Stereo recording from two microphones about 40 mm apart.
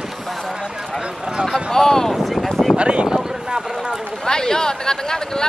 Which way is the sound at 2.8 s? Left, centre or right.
Right.